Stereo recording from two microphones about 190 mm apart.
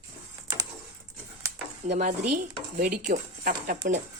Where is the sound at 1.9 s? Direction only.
55° right (ahead or behind).